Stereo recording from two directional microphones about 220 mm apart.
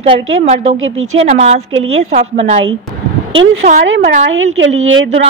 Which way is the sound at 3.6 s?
35° right (ahead or behind).